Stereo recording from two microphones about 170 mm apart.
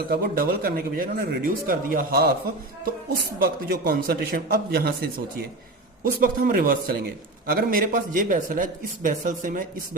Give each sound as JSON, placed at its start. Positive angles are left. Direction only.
{"t": 0.1, "sound": "a man's voice", "side_deg": -60}
{"t": 6.1, "sound": "a man's voice", "side_deg": -55}